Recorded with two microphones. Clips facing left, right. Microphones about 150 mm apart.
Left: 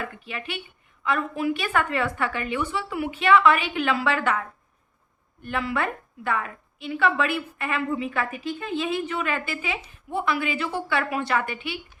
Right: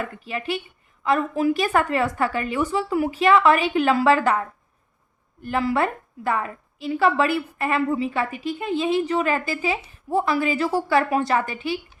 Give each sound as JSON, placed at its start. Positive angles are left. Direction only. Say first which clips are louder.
{"t": 0.3, "sound": "a woman's voice", "louder": "right 7 dB", "side_deg": -35}